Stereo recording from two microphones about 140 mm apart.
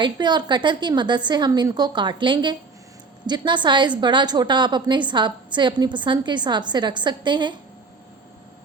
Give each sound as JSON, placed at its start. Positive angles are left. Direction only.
{"t": 0.0, "sound": "a woman's voice", "side_deg": -30}